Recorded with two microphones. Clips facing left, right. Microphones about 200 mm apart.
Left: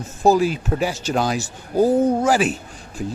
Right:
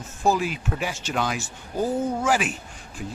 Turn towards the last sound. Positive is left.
turn(degrees=40)  # may be behind; listen again after turning